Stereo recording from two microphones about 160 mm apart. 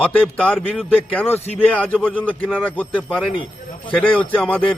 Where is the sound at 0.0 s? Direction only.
10° left (ahead or behind).